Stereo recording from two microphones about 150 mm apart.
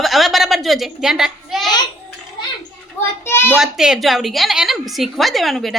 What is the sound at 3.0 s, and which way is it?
Speech, 15° left (ahead or behind).